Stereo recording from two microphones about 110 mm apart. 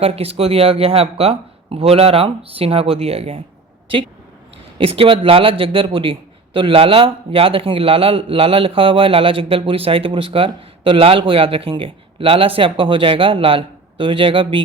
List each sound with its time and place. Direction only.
0.0 s a man's voice: 65° right (ahead or behind)
4.8 s a man's voice: 55° right (ahead or behind)